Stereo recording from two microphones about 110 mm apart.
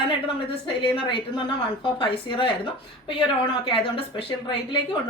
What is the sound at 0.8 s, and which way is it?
A woman's voice, 50° left (ahead or behind).